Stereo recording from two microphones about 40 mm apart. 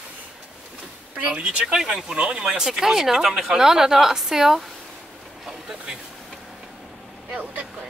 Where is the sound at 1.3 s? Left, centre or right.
Right; by 4.6 s centre.